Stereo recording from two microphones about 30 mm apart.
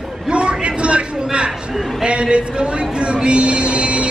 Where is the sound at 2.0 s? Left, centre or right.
Right.